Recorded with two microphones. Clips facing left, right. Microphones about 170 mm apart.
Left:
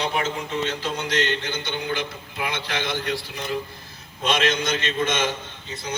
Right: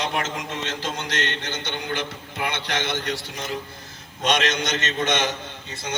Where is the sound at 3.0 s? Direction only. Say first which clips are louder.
Left 1 dB; 80° right.